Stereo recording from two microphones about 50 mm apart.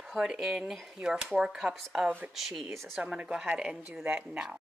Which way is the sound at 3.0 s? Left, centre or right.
Right.